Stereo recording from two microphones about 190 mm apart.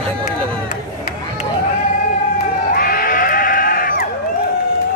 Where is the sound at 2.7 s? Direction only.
50° left (ahead or behind).